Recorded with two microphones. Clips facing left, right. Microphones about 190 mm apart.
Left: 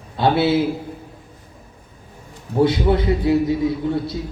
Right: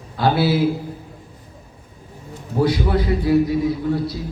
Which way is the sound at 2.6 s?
25° left (ahead or behind).